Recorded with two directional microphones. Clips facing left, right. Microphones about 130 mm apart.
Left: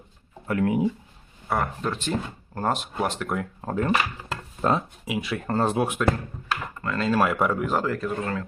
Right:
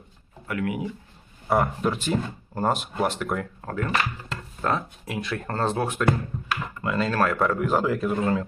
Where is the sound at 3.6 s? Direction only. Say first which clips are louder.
Left 3 dB; 25° left (ahead or behind).